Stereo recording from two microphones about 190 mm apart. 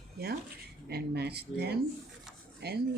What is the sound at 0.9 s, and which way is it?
Speech, 60° right (ahead or behind).